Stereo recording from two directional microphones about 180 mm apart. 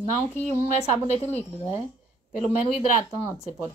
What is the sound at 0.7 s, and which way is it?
Speech, 40° left (ahead or behind).